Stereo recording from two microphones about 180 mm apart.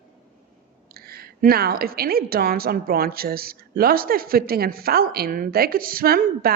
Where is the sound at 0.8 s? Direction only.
60° right (ahead or behind).